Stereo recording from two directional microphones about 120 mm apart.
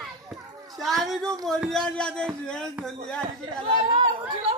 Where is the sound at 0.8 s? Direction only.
Centre (ahead or behind).